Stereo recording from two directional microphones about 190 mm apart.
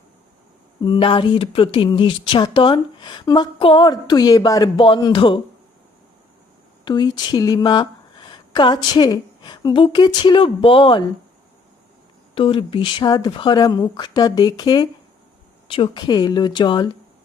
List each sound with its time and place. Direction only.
0.8 s speech: 25° left (ahead or behind)
6.8 s speech: 20° left (ahead or behind)
12.3 s speech: 30° left (ahead or behind)